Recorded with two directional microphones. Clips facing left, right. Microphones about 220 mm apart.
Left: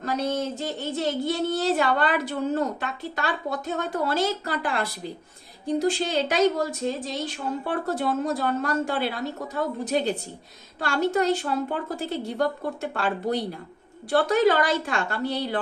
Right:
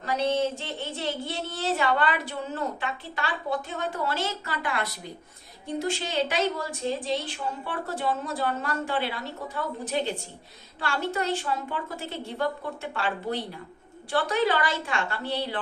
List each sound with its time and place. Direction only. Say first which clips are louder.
0.0 s speech: right 1 dB; 40° left (ahead or behind)
7.9 s a woman's voice: left 4 dB; 40° left (ahead or behind)